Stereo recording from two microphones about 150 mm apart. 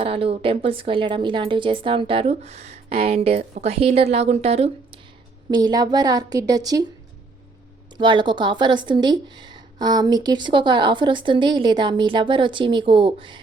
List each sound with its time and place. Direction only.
0.0 s speech: 40° right (ahead or behind)
5.5 s a woman's voice: 30° right (ahead or behind)
7.9 s speech: 30° right (ahead or behind)